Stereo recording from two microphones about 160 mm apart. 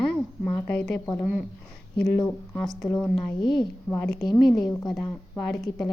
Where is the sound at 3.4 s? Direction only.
30° left (ahead or behind).